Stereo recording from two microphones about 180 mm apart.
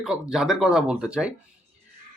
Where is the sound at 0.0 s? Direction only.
5° right (ahead or behind).